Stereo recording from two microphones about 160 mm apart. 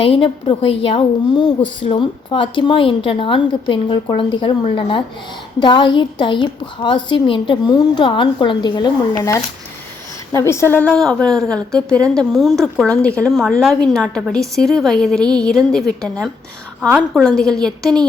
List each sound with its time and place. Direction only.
0.0 s a woman's voice: 35° left (ahead or behind); by 16.1 s 5° left (ahead or behind)
17.2 s a woman's voice: 5° left (ahead or behind)